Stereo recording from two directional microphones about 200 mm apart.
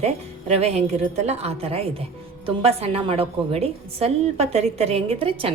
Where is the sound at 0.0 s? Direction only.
30° right (ahead or behind).